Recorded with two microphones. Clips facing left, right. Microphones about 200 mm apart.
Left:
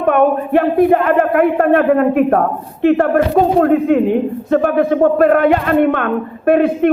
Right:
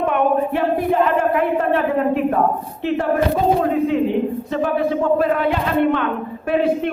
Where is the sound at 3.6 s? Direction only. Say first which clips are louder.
Left 6 dB; 55° left (ahead or behind).